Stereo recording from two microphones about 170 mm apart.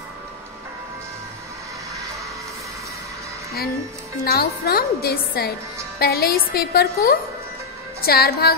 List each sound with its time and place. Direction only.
4.2 s a woman's voice: 65° left (ahead or behind)